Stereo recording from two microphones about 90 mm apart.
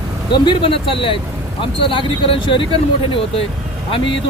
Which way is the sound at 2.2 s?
75° left (ahead or behind).